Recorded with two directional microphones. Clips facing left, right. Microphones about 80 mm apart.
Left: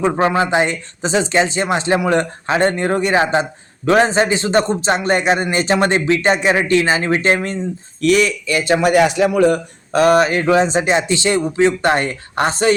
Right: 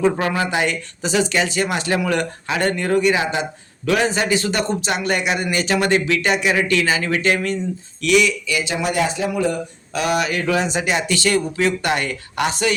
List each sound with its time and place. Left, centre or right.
0.0 s speech: left
8.7 s speech: left
9.9 s speech: left